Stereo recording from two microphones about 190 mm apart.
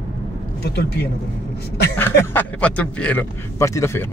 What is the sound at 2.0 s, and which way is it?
A man's voice, 10° left (ahead or behind).